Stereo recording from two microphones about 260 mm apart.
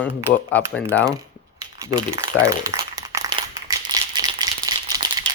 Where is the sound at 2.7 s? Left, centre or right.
Centre.